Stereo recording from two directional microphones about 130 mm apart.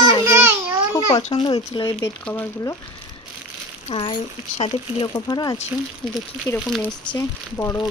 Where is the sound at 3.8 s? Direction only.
45° left (ahead or behind).